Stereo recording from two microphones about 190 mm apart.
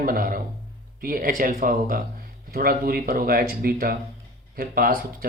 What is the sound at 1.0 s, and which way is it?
Speech, 50° right (ahead or behind).